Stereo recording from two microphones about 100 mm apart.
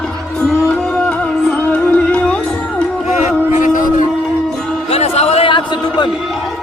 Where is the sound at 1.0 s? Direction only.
15° left (ahead or behind).